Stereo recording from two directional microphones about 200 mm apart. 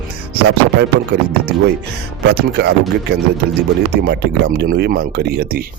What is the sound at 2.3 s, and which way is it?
Speech, 55° right (ahead or behind).